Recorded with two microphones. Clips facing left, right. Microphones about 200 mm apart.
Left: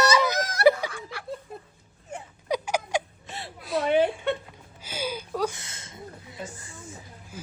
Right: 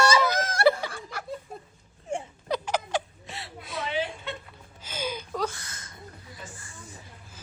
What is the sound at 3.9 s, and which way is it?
Chuckle, 55° left (ahead or behind).